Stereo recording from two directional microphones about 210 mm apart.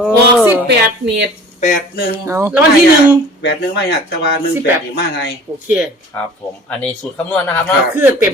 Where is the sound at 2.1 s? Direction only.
15° right (ahead or behind).